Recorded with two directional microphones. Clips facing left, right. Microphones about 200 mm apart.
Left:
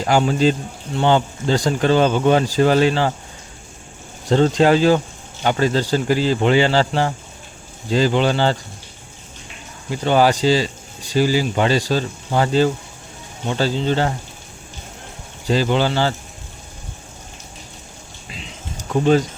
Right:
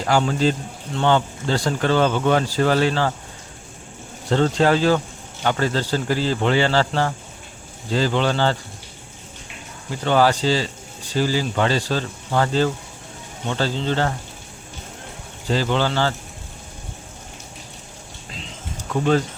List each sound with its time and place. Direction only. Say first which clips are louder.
0.0 s speech: left 3 dB; 15° left (ahead or behind)
4.3 s speech: left 3 dB; 15° left (ahead or behind)
9.9 s speech: left 2 dB; 15° left (ahead or behind)
15.4 s speech: left 3 dB; 15° left (ahead or behind)
18.9 s speech: left 4 dB; 15° left (ahead or behind)